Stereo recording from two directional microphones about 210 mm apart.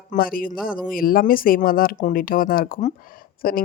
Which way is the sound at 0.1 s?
40° left (ahead or behind).